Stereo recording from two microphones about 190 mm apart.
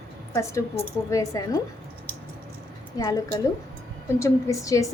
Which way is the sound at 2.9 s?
20° left (ahead or behind).